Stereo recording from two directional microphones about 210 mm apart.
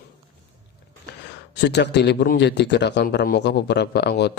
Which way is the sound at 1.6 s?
55° left (ahead or behind).